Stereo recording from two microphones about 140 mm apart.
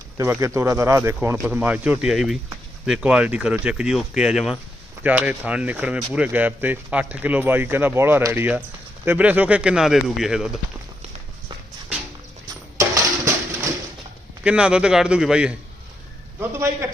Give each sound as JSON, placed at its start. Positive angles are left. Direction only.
{"t": 0.2, "sound": "speech", "side_deg": -20}
{"t": 12.8, "sound": "a sound", "side_deg": -20}
{"t": 14.4, "sound": "speech", "side_deg": -5}
{"t": 16.4, "sound": "a man's voice", "side_deg": -20}